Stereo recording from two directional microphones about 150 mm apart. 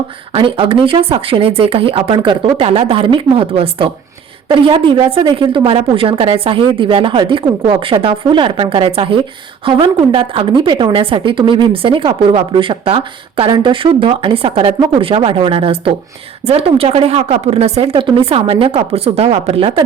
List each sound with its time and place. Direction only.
0.3 s a woman's voice: 35° right (ahead or behind)